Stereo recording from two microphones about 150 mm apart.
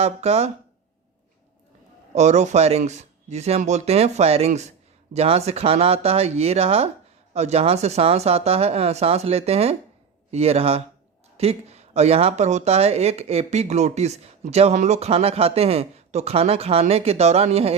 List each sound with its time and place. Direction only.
0.0 s speech: 45° right (ahead or behind)
2.1 s speech: 50° right (ahead or behind)